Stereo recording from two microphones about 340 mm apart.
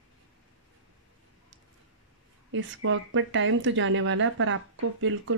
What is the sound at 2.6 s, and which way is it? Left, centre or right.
Speech, right.